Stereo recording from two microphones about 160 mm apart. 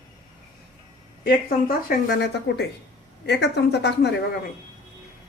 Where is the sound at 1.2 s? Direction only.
60° left (ahead or behind).